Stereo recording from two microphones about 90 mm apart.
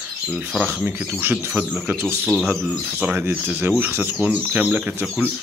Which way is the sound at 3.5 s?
20° right (ahead or behind).